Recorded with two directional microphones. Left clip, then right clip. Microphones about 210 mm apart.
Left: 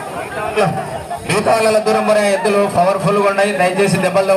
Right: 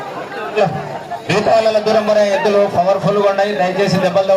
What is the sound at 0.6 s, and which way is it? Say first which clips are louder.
A man's voice: right 1 dB; 45° left (ahead or behind).